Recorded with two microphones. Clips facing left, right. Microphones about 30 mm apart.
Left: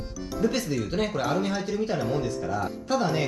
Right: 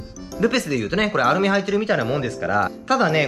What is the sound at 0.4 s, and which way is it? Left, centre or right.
Speech, right.